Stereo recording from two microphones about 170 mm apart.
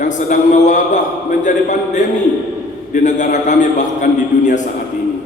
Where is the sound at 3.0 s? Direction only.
45° left (ahead or behind).